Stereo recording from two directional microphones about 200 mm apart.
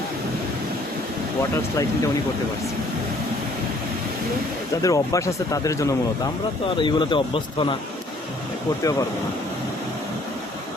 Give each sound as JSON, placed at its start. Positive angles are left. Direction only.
{"t": 4.8, "sound": "speech", "side_deg": 15}
{"t": 8.8, "sound": "speech", "side_deg": 15}